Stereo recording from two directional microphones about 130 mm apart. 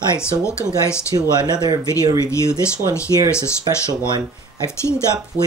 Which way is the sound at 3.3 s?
20° left (ahead or behind).